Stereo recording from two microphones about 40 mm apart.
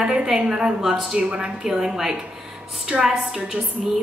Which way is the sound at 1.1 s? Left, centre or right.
Right.